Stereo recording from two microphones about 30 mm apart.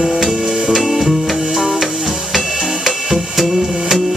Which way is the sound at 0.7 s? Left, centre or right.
Centre.